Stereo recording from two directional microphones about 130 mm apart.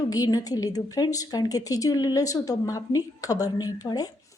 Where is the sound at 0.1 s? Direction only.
30° left (ahead or behind).